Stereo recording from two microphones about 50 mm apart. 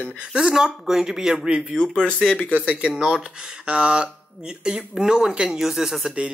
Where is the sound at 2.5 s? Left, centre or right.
Right.